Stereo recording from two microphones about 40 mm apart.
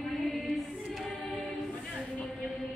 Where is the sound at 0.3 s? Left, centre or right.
Centre.